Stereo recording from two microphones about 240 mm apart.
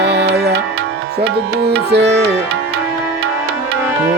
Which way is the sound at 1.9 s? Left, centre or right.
Right.